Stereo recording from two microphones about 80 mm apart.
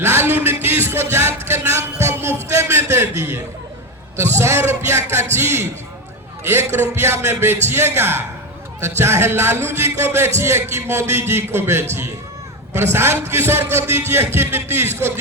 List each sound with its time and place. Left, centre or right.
0.0 s music: right
4.2 s a man's voice: right